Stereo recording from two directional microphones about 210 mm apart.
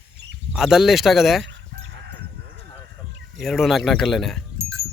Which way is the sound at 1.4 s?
60° right (ahead or behind).